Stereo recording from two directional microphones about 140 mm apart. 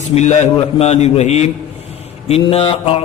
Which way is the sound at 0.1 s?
55° left (ahead or behind).